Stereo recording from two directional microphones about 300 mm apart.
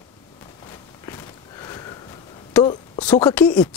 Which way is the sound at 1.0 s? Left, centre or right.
Centre.